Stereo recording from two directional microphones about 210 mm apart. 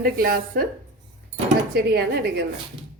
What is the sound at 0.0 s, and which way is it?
Speech, 45° right (ahead or behind).